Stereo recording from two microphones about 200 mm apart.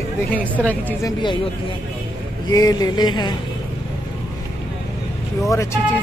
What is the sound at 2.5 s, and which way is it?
Speech, 20° left (ahead or behind).